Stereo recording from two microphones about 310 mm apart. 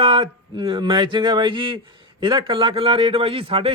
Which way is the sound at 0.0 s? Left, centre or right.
Centre.